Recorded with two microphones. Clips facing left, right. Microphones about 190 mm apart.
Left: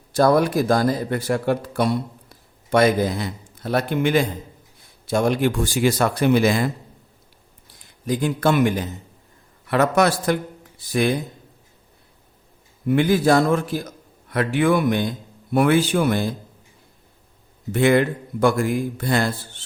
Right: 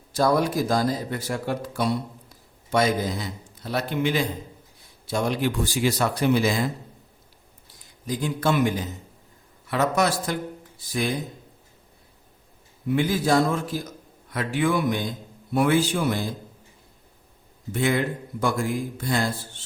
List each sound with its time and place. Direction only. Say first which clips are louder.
0.1 s speech: left 5 dB; 60° left (ahead or behind)
8.0 s speech: left 5 dB; 60° left (ahead or behind)
12.9 s speech: left 5 dB; 60° left (ahead or behind)
17.7 s speech: left 7 dB; 65° left (ahead or behind)